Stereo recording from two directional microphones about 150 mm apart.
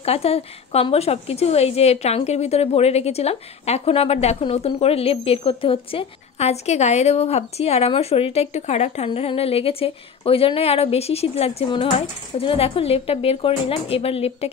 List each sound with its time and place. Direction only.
0.0 s speech: 40° left (ahead or behind)